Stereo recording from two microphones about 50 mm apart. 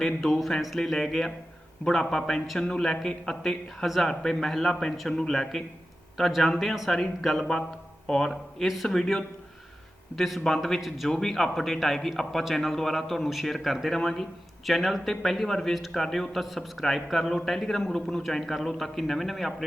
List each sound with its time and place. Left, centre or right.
0.0 s speech: centre
3.8 s a man's voice: centre
4.1 s a man's voice: centre